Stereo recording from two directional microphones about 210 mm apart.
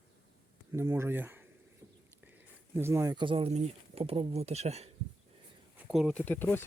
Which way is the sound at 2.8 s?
10° right (ahead or behind).